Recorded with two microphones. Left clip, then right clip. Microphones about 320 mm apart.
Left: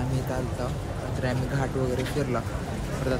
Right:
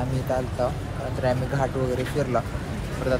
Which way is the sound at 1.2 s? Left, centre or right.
Centre.